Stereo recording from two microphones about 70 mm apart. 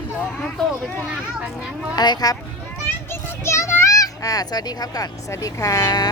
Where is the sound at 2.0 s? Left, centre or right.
Left.